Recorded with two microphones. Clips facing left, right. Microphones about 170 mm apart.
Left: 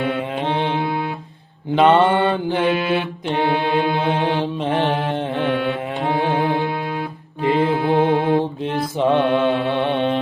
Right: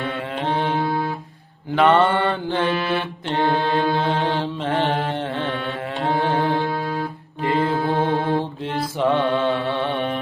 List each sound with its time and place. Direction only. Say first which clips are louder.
0.0 s music: left 4 dB; 20° left (ahead or behind)
1.7 s mantra: left 2 dB; 20° left (ahead or behind)